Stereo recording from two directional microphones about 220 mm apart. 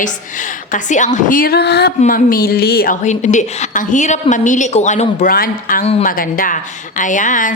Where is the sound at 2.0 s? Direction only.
35° left (ahead or behind).